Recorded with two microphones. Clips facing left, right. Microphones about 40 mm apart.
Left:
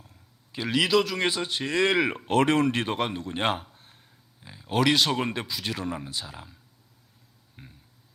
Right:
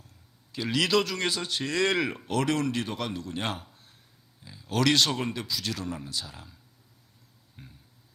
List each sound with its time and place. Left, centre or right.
0.1 s a sound: left
0.9 s a man's voice: centre
1.2 s speech: left
2.1 s speech: left
4.4 s a sound: left
4.8 s speech: centre
5.3 s speech: left
7.6 s speech: left